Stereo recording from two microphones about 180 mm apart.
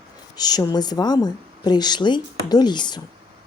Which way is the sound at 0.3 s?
20° left (ahead or behind).